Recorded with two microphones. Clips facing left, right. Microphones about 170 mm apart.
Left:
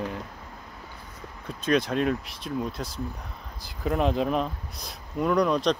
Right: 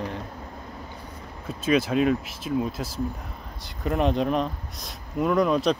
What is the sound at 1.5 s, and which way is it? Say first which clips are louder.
Speech: right 2 dB; 5° right (ahead or behind).